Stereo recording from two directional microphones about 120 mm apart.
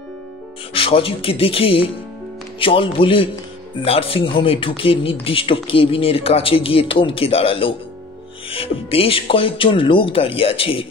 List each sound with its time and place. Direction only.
0.7 s speech: 50° left (ahead or behind)